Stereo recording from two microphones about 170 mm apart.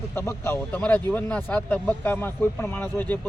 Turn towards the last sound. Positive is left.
turn(degrees=10)  # may be behind; listen again after turning